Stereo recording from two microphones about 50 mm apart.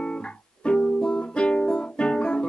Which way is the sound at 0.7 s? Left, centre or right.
Centre.